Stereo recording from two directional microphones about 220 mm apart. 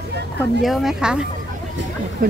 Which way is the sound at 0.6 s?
Centre (ahead or behind).